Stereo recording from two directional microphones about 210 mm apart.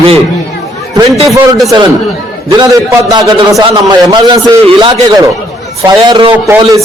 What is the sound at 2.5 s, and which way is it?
A man's voice, 20° right (ahead or behind).